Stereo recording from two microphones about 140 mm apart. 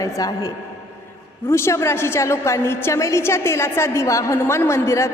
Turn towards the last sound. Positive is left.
turn(degrees=20)  # may be behind; listen again after turning